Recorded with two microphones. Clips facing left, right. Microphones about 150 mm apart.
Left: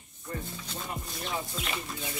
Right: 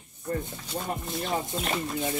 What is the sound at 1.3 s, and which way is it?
Speech, 45° right (ahead or behind).